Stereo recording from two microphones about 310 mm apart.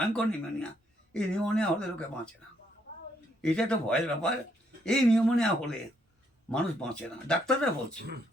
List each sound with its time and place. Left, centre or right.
0.1 s speech: centre
3.4 s speech: centre
7.9 s speech: right